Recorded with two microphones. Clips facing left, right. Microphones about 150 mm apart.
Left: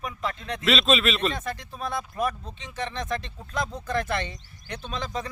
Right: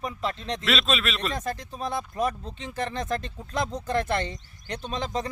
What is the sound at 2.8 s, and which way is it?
Speech, 45° right (ahead or behind).